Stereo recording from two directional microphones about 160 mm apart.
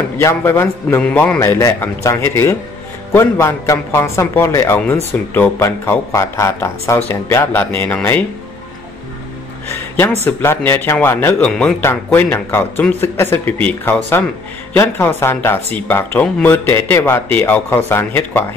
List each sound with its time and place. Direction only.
0.2 s speech: 15° left (ahead or behind)
10.2 s speech: 15° left (ahead or behind)